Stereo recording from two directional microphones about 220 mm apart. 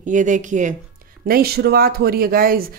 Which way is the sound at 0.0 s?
35° right (ahead or behind).